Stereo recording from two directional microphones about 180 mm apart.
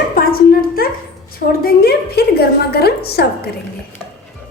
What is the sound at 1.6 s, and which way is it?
A woman's voice, 60° left (ahead or behind).